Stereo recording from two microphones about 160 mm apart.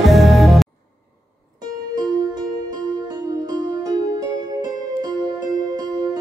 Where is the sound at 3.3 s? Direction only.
25° right (ahead or behind).